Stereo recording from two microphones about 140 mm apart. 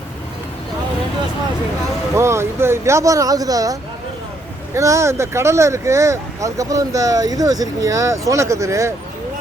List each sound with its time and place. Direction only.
2.1 s speech: 20° right (ahead or behind)